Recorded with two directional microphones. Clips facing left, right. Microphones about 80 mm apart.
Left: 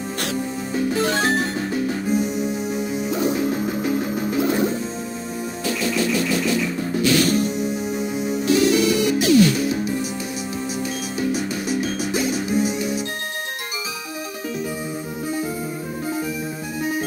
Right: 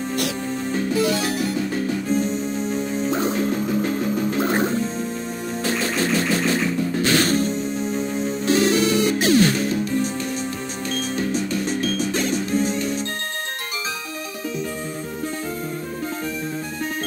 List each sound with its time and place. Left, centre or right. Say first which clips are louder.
0.9 s music: left 1 dB; left
2.0 s music: left 1 dB; centre
3.1 s music: left 1 dB; right
3.3 s music: right 1 dB; centre
4.4 s music: left 2 dB; right
5.8 s engine: left 2 dB; right
7.0 s music: left 2 dB; right
7.5 s music: even; centre
8.5 s music: left 1 dB; right
11.1 s music: left 1 dB; centre